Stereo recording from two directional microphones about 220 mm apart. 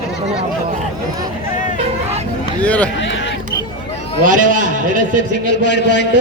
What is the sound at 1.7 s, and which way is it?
Vehicle, 30° right (ahead or behind).